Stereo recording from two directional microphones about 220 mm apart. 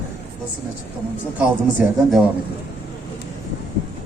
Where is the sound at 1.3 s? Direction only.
5° right (ahead or behind).